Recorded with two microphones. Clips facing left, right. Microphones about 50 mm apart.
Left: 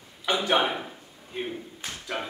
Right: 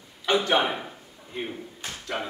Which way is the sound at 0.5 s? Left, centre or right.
Centre.